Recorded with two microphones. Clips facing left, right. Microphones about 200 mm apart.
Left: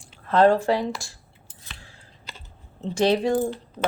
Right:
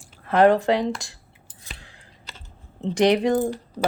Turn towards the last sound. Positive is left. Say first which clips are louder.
# right 1 dB
turn(degrees=-15)  # may be behind; listen again after turning